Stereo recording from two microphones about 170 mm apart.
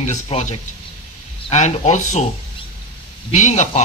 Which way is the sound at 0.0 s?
40° left (ahead or behind).